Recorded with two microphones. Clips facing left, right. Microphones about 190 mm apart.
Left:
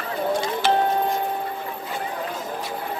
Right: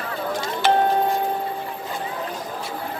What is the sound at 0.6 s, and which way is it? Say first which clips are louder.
Music: right 3 dB; 55° right (ahead or behind).